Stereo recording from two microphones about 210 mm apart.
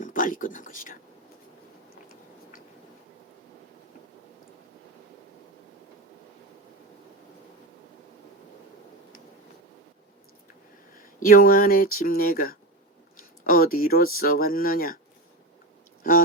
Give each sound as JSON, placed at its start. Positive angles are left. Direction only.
{"t": 0.0, "sound": "speech", "side_deg": 40}
{"t": 11.2, "sound": "speech", "side_deg": 45}